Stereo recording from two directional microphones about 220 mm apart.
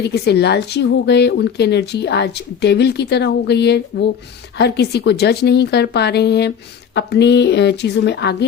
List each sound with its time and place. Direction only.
0.0 s speech: 50° left (ahead or behind)